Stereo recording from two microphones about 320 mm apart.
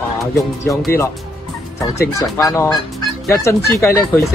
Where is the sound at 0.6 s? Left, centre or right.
Centre.